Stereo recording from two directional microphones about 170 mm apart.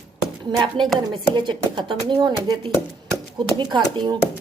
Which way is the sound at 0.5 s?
25° right (ahead or behind).